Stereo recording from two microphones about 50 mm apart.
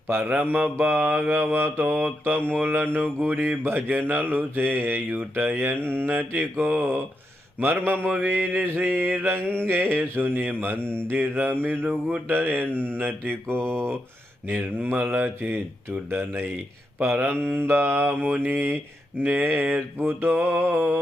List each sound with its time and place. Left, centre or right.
0.3 s speech: right
3.3 s mantra: right
6.1 s speech: right
7.6 s mantra: right
11.6 s speech: right
12.3 s mantra: right
14.6 s speech: right
17.0 s mantra: right